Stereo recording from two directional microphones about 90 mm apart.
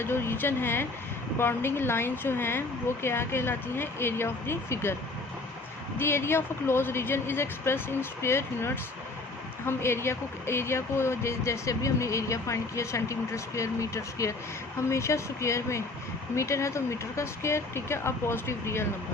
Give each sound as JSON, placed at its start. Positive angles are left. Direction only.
{"t": 0.0, "sound": "a woman's voice", "side_deg": 25}
{"t": 6.0, "sound": "a woman's voice", "side_deg": 30}